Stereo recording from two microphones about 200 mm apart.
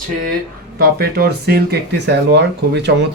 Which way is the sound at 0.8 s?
50° right (ahead or behind).